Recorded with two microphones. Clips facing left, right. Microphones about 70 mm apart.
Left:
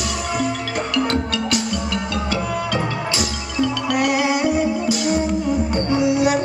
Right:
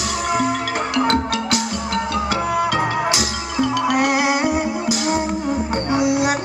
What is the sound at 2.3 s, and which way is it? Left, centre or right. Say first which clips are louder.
Music: right 3 dB; right.